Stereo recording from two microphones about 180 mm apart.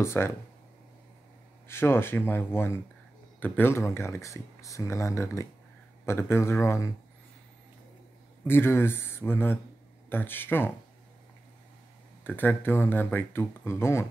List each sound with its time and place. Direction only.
0.0 s speech: 15° left (ahead or behind)
1.7 s speech: 15° left (ahead or behind)
8.5 s speech: 15° left (ahead or behind)
12.2 s speech: 10° left (ahead or behind)